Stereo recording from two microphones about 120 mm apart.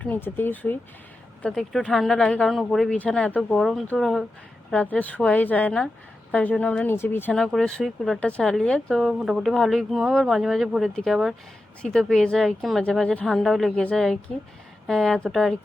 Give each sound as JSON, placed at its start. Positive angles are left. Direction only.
{"t": 0.0, "sound": "speech", "side_deg": 15}
{"t": 1.4, "sound": "speech", "side_deg": 5}
{"t": 7.3, "sound": "speech", "side_deg": 5}